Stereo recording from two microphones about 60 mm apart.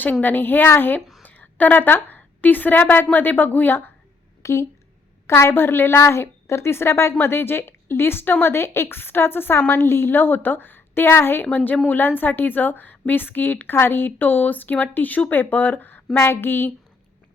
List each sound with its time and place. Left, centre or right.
0.0 s a woman's voice: left
4.4 s a woman's voice: left
11.5 s a woman's voice: left
16.1 s a woman's voice: left